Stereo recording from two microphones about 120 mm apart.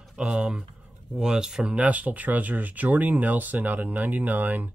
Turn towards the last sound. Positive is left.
turn(degrees=-15)  # may be behind; listen again after turning